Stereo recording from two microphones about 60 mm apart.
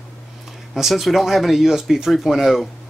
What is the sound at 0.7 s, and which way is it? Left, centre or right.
Speech, centre.